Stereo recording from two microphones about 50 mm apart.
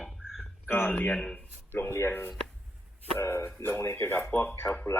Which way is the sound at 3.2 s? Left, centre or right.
Left.